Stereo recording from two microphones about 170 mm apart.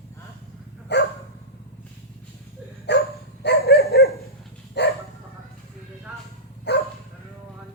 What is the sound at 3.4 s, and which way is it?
Dog, 70° left (ahead or behind).